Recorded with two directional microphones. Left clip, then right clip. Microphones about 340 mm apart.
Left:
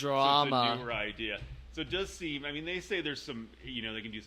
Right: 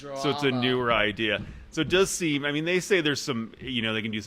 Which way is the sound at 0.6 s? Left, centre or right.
Centre.